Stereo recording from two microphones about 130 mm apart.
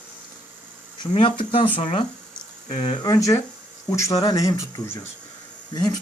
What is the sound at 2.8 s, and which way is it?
Speech, 30° left (ahead or behind).